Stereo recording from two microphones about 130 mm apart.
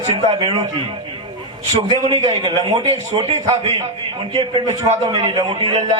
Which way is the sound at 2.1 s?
30° right (ahead or behind).